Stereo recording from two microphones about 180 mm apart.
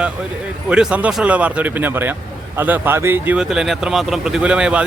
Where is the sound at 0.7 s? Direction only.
5° right (ahead or behind).